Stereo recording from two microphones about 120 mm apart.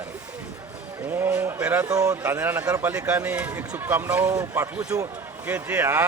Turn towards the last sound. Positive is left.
turn(degrees=-20)  # may be behind; listen again after turning